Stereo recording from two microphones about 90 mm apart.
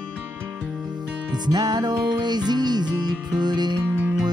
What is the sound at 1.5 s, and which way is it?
Music, 50° right (ahead or behind).